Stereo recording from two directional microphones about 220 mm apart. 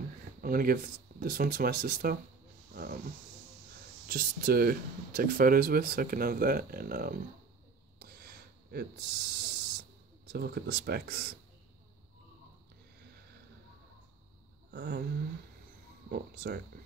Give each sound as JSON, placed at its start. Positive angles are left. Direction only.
{"t": 0.4, "sound": "speech", "side_deg": -40}
{"t": 2.7, "sound": "roaring cats", "side_deg": -40}
{"t": 4.1, "sound": "speech", "side_deg": -45}
{"t": 8.0, "sound": "a sound", "side_deg": -45}
{"t": 10.2, "sound": "speech", "side_deg": -45}
{"t": 14.7, "sound": "a sound", "side_deg": -50}
{"t": 16.1, "sound": "speech", "side_deg": -45}